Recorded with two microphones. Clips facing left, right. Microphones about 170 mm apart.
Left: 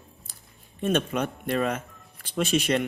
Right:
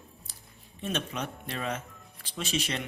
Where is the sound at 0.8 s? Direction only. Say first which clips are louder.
Left 8 dB; 55° left (ahead or behind).